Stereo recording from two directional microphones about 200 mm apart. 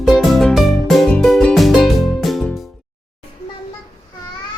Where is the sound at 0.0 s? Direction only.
Centre (ahead or behind).